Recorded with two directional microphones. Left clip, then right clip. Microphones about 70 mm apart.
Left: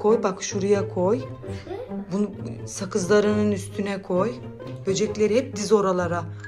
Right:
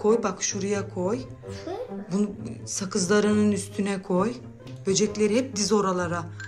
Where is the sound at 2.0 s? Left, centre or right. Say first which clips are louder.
Left 2 dB; right.